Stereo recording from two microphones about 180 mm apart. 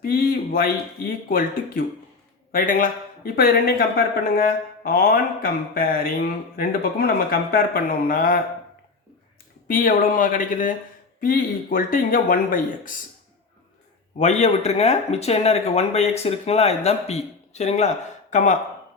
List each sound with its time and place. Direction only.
0.0 s speech: 55° left (ahead or behind)
9.6 s speech: 50° left (ahead or behind)
14.2 s speech: 40° left (ahead or behind)